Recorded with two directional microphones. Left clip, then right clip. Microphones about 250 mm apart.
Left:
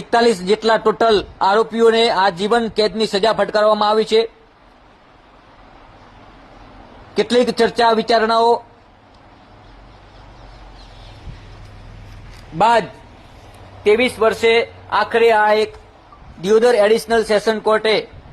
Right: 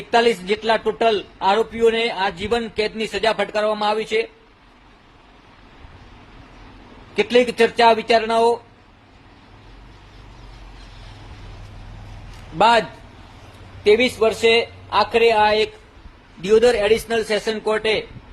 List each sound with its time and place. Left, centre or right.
0.1 s a man's voice: left
7.3 s a man's voice: left
13.9 s a man's voice: centre
16.4 s a man's voice: centre